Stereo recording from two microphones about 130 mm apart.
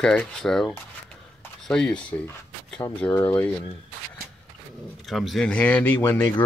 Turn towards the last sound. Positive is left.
turn(degrees=10)  # may be behind; listen again after turning